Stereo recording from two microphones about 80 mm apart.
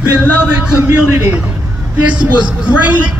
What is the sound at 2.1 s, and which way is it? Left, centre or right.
Speech, centre.